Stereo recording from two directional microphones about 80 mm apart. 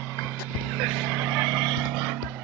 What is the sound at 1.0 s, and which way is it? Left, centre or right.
Vehicle, right.